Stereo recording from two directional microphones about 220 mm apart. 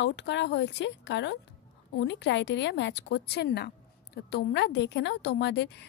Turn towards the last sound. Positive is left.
turn(degrees=50)  # may be behind; listen again after turning